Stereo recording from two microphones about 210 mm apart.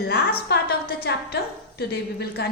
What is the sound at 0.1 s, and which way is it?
A woman's voice, 50° left (ahead or behind).